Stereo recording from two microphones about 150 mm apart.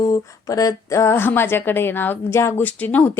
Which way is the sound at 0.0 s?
25° left (ahead or behind).